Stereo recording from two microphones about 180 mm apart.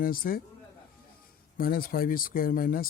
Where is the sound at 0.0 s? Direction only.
55° left (ahead or behind).